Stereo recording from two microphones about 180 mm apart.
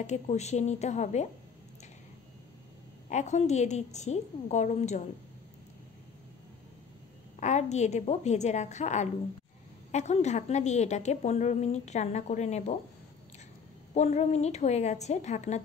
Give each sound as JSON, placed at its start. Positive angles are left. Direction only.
{"t": 0.0, "sound": "a woman's voice", "side_deg": 40}
{"t": 3.1, "sound": "a woman's voice", "side_deg": 40}
{"t": 7.3, "sound": "a woman's voice", "side_deg": 40}
{"t": 13.9, "sound": "a woman's voice", "side_deg": 40}